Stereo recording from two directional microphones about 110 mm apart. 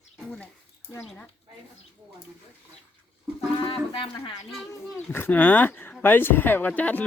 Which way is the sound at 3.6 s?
55° left (ahead or behind).